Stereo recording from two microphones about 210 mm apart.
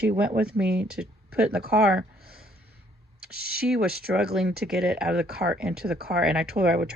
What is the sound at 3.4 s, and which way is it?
Speech, 50° right (ahead or behind).